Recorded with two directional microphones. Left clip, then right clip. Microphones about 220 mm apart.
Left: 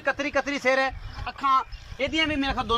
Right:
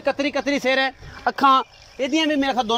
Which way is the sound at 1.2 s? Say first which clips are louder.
Right 7 dB; 45° right (ahead or behind).